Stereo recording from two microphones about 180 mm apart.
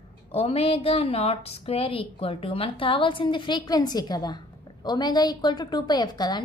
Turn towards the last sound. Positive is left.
turn(degrees=20)  # may be behind; listen again after turning